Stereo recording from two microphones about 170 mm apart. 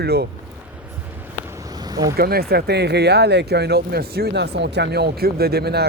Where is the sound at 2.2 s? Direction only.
65° right (ahead or behind).